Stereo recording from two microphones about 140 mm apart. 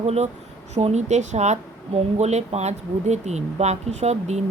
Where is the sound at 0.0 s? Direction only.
50° right (ahead or behind).